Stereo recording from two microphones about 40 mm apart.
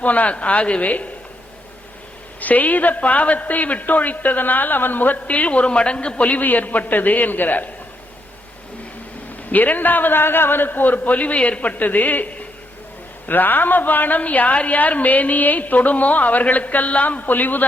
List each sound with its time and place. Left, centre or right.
0.0 s speech: left
2.4 s a woman's voice: left
9.5 s a woman's voice: left
13.2 s a woman's voice: left
14.2 s a woman's voice: left